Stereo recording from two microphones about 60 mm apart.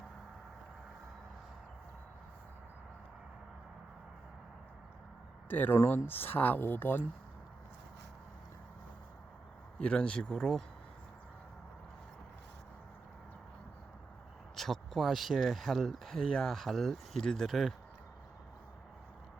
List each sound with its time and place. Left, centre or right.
5.5 s speech: left
9.7 s speech: centre
10.3 s speech: centre
14.5 s speech: centre